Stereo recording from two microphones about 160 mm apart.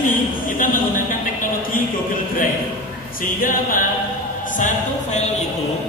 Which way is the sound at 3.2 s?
60° left (ahead or behind).